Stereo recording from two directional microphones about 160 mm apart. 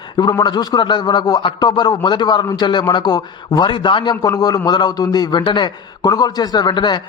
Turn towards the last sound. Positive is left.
turn(degrees=25)  # may be behind; listen again after turning